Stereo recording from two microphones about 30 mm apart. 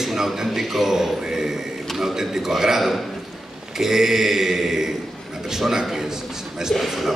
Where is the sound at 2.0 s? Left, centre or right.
Centre.